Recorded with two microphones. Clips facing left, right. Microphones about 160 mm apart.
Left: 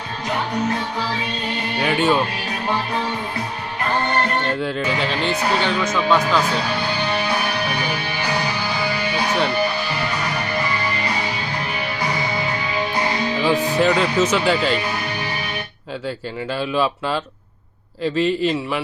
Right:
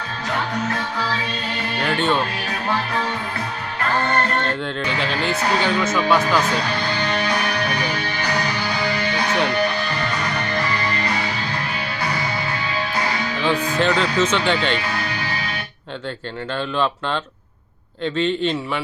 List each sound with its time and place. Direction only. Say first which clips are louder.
1.8 s speech: left 2 dB; 5° left (ahead or behind)
4.6 s speech: left 2 dB; 5° left (ahead or behind)
6.5 s music: even; 5° left (ahead or behind)
13.5 s speech: left 1 dB; 20° left (ahead or behind)
13.7 s speech: left 1 dB; 5° left (ahead or behind)
16.6 s speech: left 1 dB; 5° left (ahead or behind)